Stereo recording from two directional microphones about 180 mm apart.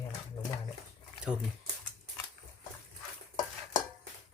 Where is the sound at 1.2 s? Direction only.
5° right (ahead or behind).